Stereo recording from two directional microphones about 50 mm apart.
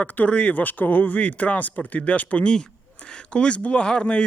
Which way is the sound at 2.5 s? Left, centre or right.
Centre.